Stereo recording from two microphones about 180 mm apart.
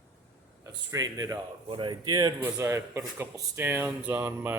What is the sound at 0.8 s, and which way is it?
Speech, 20° right (ahead or behind).